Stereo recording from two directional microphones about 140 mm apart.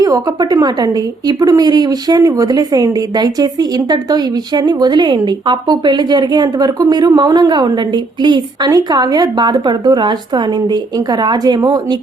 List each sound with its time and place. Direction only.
0.0 s a woman's voice: 25° right (ahead or behind)